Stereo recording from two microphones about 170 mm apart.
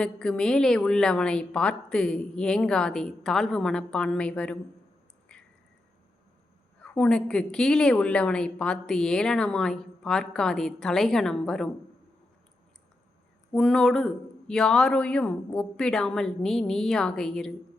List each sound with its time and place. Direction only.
0.0 s a woman's voice: 5° left (ahead or behind)
5.3 s drip: 5° left (ahead or behind)
6.8 s a woman's voice: 5° left (ahead or behind)
13.5 s a woman's voice: 5° left (ahead or behind)